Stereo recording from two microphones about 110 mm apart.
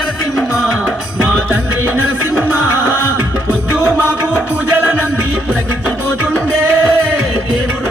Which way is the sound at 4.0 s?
15° right (ahead or behind).